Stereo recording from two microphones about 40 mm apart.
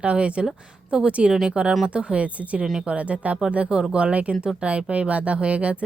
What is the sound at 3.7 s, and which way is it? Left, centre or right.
Speech, right.